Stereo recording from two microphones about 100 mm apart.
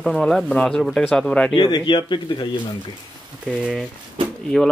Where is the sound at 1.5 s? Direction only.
55° left (ahead or behind).